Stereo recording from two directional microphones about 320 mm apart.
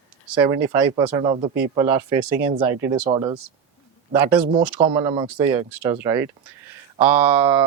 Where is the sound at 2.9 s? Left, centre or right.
Centre.